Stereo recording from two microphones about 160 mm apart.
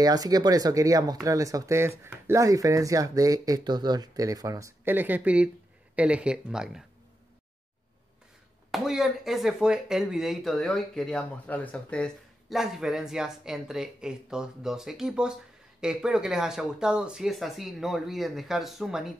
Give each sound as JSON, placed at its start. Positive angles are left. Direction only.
{"t": 0.0, "sound": "speech", "side_deg": -25}
{"t": 8.7, "sound": "speech", "side_deg": 0}